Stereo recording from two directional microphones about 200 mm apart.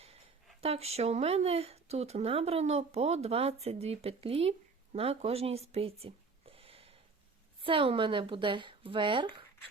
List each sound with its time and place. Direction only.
0.6 s a woman's voice: 30° right (ahead or behind)